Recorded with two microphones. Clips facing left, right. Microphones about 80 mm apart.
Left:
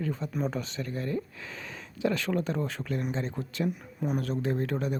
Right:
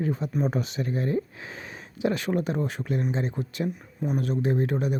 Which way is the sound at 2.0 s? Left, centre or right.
Centre.